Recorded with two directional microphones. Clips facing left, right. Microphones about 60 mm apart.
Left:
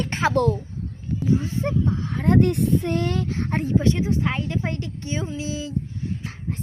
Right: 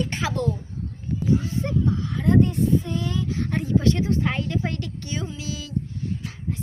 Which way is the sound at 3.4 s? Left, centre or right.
Left.